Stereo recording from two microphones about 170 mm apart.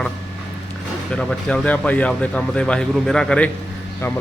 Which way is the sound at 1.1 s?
5° left (ahead or behind).